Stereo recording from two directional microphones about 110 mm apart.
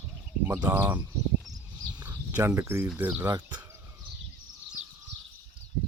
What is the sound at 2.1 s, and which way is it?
Speech, 20° right (ahead or behind).